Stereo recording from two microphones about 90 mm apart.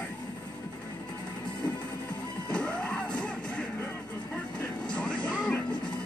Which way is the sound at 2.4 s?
15° left (ahead or behind).